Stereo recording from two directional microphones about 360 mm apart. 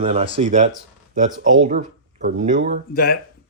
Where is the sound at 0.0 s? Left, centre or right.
Centre.